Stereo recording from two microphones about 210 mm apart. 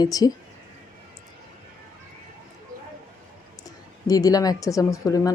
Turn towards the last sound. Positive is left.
turn(degrees=15)  # may be behind; listen again after turning